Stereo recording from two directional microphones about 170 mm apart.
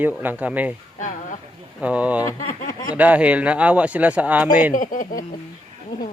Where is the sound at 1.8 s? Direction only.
5° right (ahead or behind).